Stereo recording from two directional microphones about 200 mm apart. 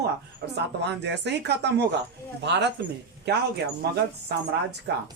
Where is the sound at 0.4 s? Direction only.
50° right (ahead or behind).